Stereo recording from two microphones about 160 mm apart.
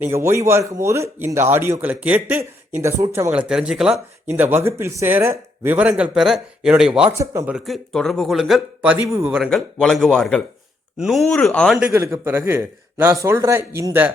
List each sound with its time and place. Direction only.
0.0 s speech: 15° right (ahead or behind)
7.2 s speech: 20° right (ahead or behind)
7.5 s speech: centre (ahead or behind); by 9.3 s 15° right (ahead or behind)
9.3 s speech: centre (ahead or behind)
11.8 s speech: 15° right (ahead or behind)